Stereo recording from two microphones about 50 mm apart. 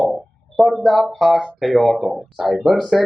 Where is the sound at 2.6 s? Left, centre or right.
Centre.